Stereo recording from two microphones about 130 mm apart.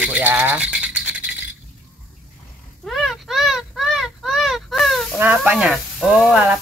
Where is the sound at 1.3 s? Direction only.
5° right (ahead or behind).